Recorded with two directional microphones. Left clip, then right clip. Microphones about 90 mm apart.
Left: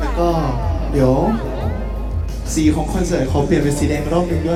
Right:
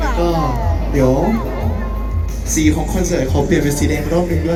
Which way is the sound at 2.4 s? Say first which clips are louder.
Right 1 dB; 45° left (ahead or behind).